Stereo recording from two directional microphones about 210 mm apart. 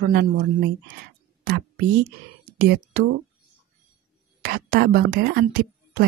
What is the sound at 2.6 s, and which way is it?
Speech, 45° right (ahead or behind).